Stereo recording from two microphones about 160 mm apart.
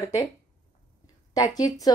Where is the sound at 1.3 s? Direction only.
25° left (ahead or behind).